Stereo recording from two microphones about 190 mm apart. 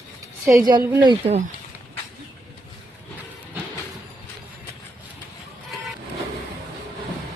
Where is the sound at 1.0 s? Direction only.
25° right (ahead or behind).